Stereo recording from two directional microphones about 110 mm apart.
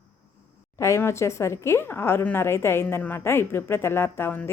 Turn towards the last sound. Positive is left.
turn(degrees=20)  # may be behind; listen again after turning